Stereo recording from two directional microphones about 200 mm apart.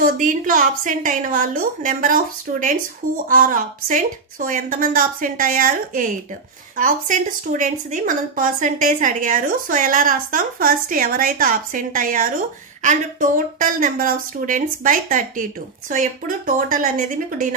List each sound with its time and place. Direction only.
0.0 s a woman's voice: 40° right (ahead or behind)